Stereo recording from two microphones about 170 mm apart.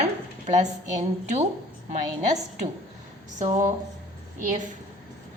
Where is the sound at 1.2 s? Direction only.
40° right (ahead or behind).